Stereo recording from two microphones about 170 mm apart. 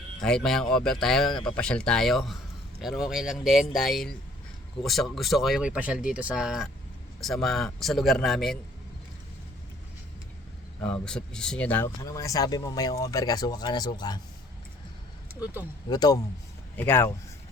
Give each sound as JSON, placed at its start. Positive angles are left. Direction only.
{"t": 0.2, "sound": "speech", "side_deg": 5}
{"t": 11.0, "sound": "speech", "side_deg": 5}
{"t": 15.9, "sound": "speech", "side_deg": 25}
{"t": 16.7, "sound": "speech", "side_deg": 15}